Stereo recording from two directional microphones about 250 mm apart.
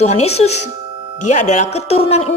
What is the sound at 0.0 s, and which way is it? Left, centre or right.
Speech, left.